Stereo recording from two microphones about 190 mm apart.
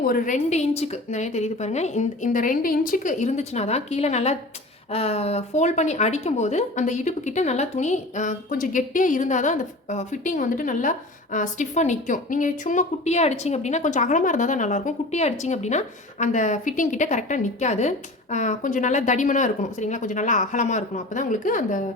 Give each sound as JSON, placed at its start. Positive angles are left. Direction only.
{"t": 0.0, "sound": "speech", "side_deg": 45}